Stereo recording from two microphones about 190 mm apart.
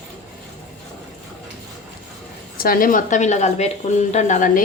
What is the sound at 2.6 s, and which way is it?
A woman's voice, 50° left (ahead or behind).